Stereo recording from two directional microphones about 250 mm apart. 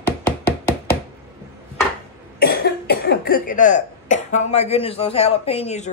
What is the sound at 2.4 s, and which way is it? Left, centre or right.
Speech, left.